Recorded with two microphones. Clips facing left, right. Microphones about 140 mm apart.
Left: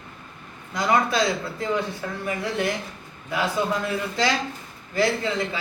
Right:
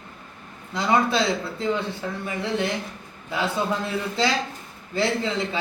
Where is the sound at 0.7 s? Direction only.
25° right (ahead or behind).